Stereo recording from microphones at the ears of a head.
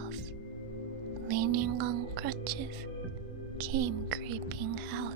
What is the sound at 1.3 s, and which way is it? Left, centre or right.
Speech, right.